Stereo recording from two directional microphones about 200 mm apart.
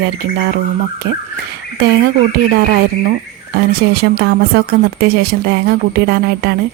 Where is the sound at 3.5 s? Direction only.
50° right (ahead or behind).